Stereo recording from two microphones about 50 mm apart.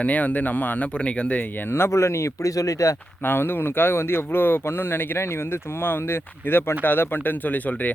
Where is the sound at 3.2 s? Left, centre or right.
Left.